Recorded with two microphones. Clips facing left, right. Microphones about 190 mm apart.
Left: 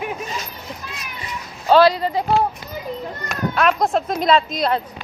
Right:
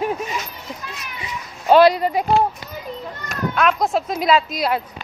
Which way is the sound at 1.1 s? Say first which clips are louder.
Even; 15° right (ahead or behind).